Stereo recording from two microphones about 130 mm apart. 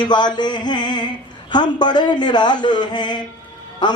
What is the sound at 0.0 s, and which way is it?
Speech, 35° left (ahead or behind).